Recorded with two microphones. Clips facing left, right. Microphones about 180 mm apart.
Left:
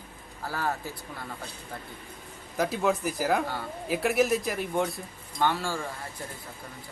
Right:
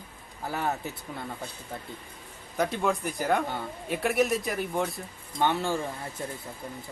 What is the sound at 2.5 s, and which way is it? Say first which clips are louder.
A man's voice: left 1 dB; centre (ahead or behind).